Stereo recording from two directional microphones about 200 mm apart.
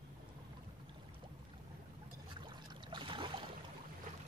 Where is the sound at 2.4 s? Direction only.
20° right (ahead or behind).